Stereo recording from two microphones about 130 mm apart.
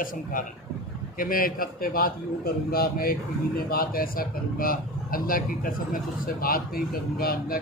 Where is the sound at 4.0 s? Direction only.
90° left.